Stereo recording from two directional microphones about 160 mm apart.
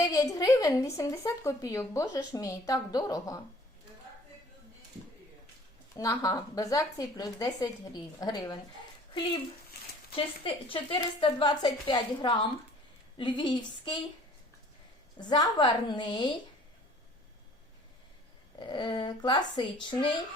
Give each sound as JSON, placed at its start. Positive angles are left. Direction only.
{"t": 0.0, "sound": "speech", "side_deg": 20}
{"t": 6.0, "sound": "speech", "side_deg": 20}
{"t": 10.4, "sound": "speech", "side_deg": 30}
{"t": 15.2, "sound": "speech", "side_deg": 25}
{"t": 18.6, "sound": "speech", "side_deg": 30}